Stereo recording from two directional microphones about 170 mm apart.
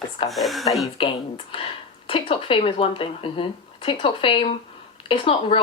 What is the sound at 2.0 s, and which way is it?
Speech, 30° left (ahead or behind).